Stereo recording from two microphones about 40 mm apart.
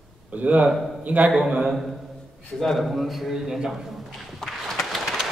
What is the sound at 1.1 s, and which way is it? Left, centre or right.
Speech, right.